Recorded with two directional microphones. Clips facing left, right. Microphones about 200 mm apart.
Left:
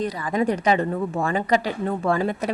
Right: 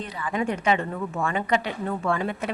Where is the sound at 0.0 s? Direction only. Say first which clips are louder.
Left 5 dB; 40° left (ahead or behind).